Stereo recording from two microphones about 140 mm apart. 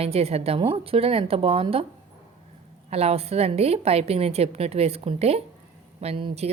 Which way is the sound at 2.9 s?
45° right (ahead or behind).